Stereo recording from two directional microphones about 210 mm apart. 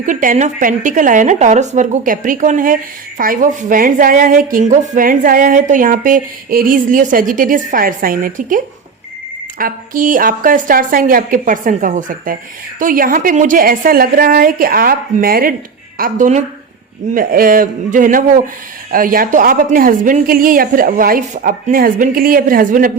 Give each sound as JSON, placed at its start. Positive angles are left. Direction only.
{"t": 0.0, "sound": "a woman's voice", "side_deg": -40}